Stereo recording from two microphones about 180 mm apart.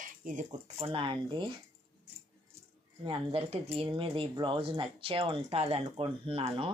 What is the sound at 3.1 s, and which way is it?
Speech, 30° right (ahead or behind).